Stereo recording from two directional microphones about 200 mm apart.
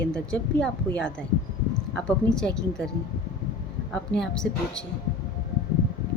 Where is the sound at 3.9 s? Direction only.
5° left (ahead or behind).